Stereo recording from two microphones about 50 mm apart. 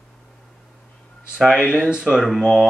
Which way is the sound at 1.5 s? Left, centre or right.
Centre.